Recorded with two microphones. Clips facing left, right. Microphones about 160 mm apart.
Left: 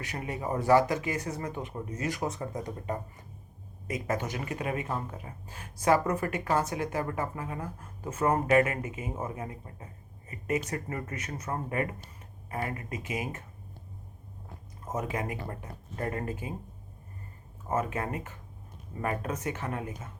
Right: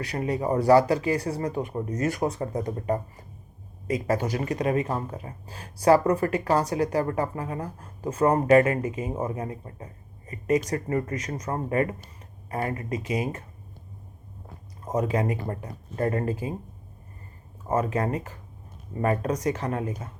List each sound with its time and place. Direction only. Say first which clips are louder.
0.0 s speech: right 8 dB; 35° right (ahead or behind)
2.6 s speech: right 8 dB; 55° right (ahead or behind)
3.8 s speech: right 6 dB; 35° right (ahead or behind)
14.9 s speech: right 8 dB; 35° right (ahead or behind)
17.7 s speech: right 6 dB; 35° right (ahead or behind)